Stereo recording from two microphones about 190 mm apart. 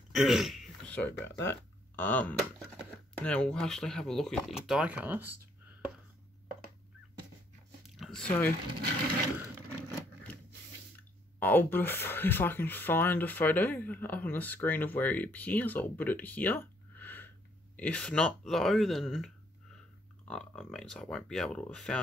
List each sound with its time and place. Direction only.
0.1 s speech: centre (ahead or behind)
7.8 s chewing: centre (ahead or behind)
9.7 s vehicle: 10° left (ahead or behind)
11.3 s speech: 10° left (ahead or behind)